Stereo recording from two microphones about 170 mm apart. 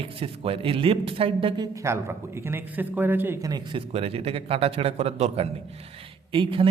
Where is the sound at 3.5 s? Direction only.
30° right (ahead or behind).